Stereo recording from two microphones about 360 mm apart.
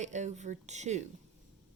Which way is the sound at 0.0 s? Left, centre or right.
Centre.